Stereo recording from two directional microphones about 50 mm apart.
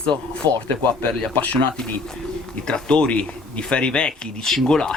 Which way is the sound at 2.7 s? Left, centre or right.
Left.